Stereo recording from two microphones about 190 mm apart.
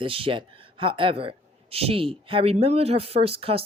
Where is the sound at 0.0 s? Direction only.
30° right (ahead or behind).